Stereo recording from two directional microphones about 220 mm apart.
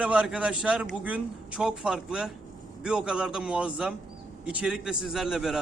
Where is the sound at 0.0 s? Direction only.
5° right (ahead or behind).